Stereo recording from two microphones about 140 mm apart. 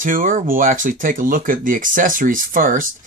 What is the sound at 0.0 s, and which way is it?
Speech, 70° right (ahead or behind).